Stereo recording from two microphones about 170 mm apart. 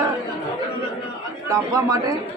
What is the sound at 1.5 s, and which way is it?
Speech, 20° right (ahead or behind).